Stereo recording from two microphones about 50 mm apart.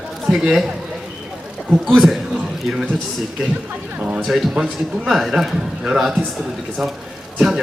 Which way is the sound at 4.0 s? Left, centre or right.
Right.